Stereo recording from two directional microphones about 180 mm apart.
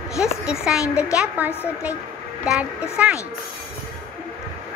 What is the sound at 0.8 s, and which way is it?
Speech, 15° left (ahead or behind).